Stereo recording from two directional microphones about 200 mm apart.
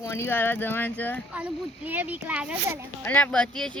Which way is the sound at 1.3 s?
5° right (ahead or behind).